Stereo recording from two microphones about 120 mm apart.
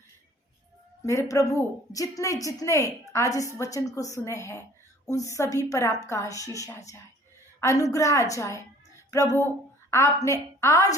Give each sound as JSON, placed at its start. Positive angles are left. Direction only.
{"t": 1.0, "sound": "a woman's voice", "side_deg": 25}